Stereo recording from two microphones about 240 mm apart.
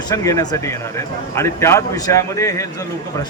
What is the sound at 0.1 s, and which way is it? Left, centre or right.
A man's voice, centre.